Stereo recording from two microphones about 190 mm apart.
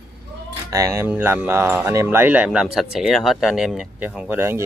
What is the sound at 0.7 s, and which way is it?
Speech, 15° right (ahead or behind).